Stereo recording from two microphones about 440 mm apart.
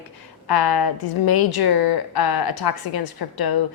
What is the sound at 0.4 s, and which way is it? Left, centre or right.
A woman's voice, left.